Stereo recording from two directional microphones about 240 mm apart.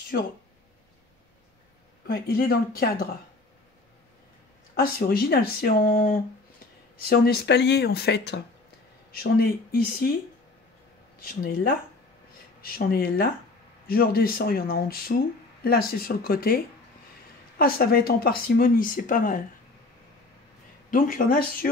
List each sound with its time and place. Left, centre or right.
0.1 s speech: left
2.0 s speech: left
4.7 s speech: left
11.1 s speech: left
20.9 s speech: left